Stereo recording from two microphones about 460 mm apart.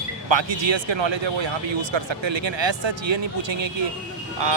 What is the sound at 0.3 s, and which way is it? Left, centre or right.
A man's voice, right.